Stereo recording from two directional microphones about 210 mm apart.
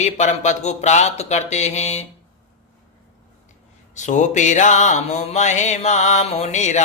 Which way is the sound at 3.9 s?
35° left (ahead or behind).